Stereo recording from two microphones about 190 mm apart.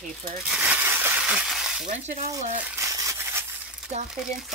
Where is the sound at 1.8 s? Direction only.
40° right (ahead or behind).